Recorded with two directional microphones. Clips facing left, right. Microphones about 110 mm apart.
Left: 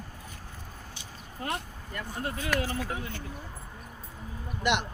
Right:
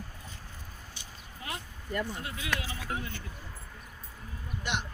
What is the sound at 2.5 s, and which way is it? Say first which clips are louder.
Speech: left 9 dB; 55° left (ahead or behind).